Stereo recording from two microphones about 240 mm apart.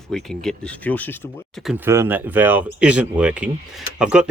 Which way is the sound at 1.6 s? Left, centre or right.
Centre.